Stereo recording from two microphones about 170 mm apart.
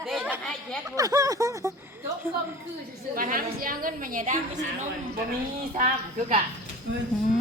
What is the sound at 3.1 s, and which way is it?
A woman's voice, 55° right (ahead or behind).